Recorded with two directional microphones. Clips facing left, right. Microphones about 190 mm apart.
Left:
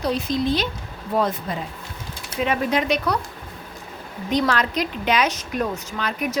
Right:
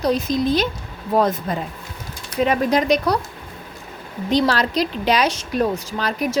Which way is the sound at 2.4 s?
40° right (ahead or behind).